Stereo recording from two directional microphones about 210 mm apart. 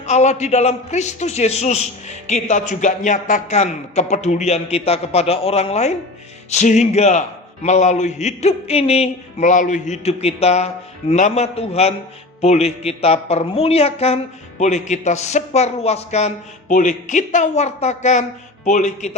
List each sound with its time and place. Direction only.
0.0 s a man's voice: 35° left (ahead or behind)